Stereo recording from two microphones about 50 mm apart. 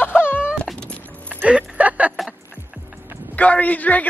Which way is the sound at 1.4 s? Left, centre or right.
Right.